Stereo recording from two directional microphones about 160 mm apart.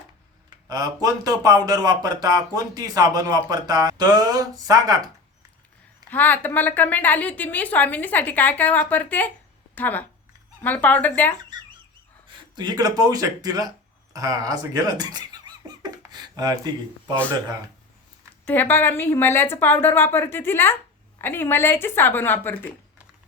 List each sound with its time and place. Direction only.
0.7 s speech: 25° right (ahead or behind)
6.1 s a woman's voice: 10° left (ahead or behind)
12.5 s speech: 25° right (ahead or behind)
15.8 s a sound: 25° right (ahead or behind)
18.4 s a woman's voice: 10° left (ahead or behind)